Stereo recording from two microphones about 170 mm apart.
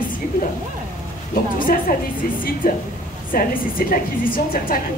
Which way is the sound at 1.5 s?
55° left (ahead or behind).